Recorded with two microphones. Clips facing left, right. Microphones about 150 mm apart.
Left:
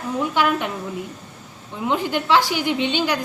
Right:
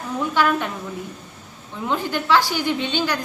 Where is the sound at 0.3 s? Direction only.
15° left (ahead or behind).